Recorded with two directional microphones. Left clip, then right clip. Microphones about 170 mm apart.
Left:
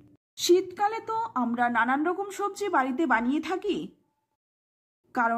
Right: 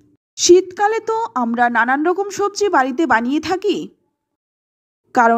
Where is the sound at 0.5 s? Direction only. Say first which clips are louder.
Right 11 dB; 35° right (ahead or behind).